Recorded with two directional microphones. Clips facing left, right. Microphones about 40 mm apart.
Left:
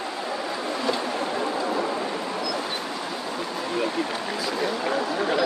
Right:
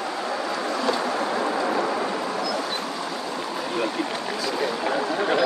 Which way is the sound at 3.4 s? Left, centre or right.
Centre.